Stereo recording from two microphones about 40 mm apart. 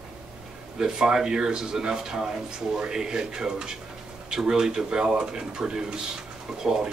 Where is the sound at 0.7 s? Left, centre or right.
Centre.